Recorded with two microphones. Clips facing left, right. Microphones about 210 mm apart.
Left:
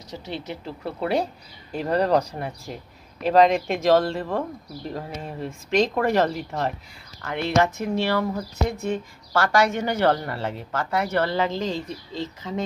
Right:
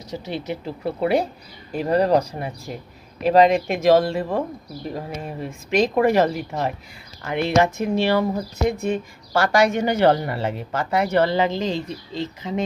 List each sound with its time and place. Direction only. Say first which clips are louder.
0.1 s speech: right 5 dB; 10° right (ahead or behind)